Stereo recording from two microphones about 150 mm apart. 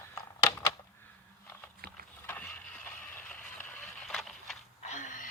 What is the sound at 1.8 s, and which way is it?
Boat, 90° right.